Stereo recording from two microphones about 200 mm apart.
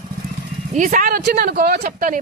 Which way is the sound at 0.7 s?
40° right (ahead or behind).